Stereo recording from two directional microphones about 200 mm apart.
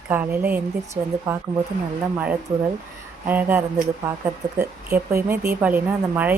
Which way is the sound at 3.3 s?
10° right (ahead or behind).